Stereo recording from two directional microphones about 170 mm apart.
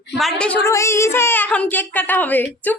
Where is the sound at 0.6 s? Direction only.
15° left (ahead or behind).